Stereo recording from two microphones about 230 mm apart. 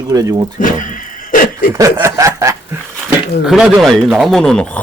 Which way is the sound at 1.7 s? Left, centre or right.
Centre.